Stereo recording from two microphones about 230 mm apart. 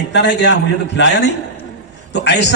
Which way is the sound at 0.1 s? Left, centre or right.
Left.